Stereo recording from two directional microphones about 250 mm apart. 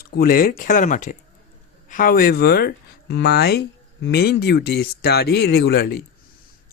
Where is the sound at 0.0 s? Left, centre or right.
Left.